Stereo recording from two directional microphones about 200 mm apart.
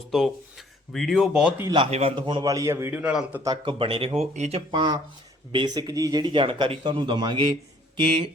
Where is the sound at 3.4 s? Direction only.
20° right (ahead or behind).